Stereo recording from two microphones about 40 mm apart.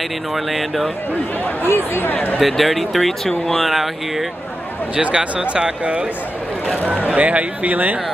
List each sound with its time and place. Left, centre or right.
0.3 s speech: centre
1.6 s speech: left
2.4 s speech: centre
4.9 s speech: right
7.2 s speech: right